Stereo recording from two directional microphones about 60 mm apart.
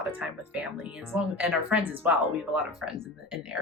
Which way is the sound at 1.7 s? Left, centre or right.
Right.